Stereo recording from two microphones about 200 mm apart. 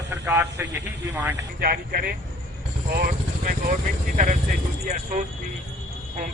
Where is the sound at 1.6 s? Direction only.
50° right (ahead or behind).